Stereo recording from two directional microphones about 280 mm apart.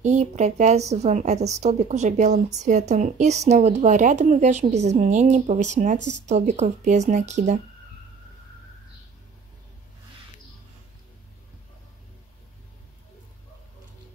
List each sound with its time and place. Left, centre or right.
0.0 s a woman's voice: right
5.9 s speech: right
6.2 s a woman's voice: right